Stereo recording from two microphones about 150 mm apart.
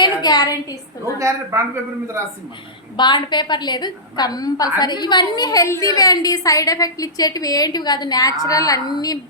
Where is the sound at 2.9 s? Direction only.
30° left (ahead or behind).